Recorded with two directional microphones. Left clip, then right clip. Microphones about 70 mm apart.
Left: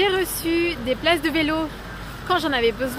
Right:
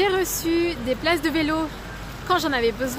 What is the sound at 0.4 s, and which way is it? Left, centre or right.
Speech, centre.